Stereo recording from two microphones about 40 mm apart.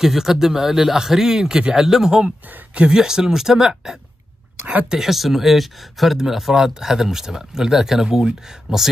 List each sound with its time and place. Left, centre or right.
0.0 s speech: centre